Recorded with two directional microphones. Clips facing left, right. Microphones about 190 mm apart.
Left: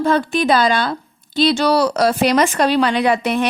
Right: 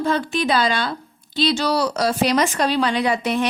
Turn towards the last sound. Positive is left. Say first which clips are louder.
# left 3 dB
turn(degrees=65)  # may be behind; listen again after turning